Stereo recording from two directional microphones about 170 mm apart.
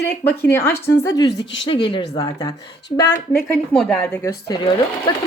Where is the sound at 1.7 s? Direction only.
30° left (ahead or behind).